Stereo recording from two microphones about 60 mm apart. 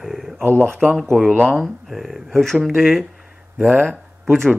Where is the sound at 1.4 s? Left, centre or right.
Centre.